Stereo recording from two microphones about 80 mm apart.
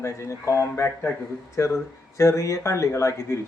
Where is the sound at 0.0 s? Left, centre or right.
Left.